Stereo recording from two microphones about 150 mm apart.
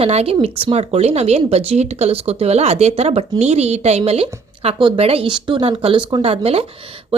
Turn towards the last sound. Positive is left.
turn(degrees=-40)  # may be behind; listen again after turning